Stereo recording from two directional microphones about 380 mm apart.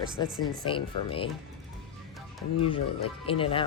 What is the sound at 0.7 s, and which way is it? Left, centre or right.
Speech, centre.